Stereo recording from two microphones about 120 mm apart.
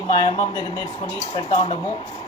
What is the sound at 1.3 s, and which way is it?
Speech, 50° left (ahead or behind).